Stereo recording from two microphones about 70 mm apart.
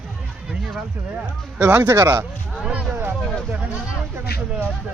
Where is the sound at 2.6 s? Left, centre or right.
Centre.